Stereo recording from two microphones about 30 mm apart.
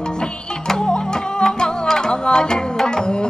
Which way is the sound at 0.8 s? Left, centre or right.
Left.